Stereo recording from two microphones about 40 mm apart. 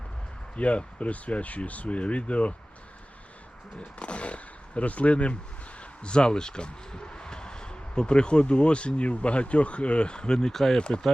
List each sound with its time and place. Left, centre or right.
0.5 s speech: left
3.8 s speech: left
10.5 s speech: centre
10.8 s speech: left